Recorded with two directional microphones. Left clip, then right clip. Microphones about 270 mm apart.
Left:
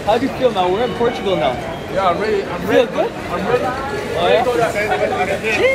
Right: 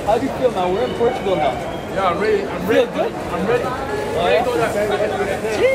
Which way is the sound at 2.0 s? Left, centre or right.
Centre.